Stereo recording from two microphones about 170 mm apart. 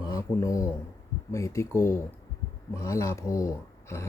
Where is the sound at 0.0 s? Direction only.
20° left (ahead or behind).